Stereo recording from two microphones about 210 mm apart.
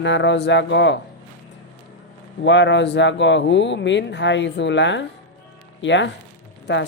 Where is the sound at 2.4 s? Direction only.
60° left (ahead or behind).